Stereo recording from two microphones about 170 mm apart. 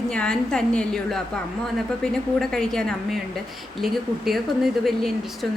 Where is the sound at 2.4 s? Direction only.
5° left (ahead or behind).